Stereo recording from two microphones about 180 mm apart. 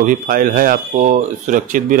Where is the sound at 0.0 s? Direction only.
50° right (ahead or behind).